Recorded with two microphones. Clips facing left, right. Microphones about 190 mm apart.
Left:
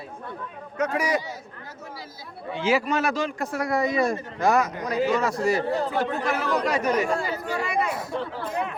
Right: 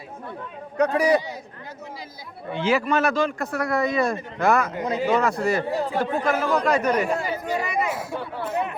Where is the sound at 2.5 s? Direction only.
60° right (ahead or behind).